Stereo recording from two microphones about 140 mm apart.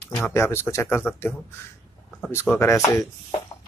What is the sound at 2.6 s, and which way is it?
Speech, 20° left (ahead or behind).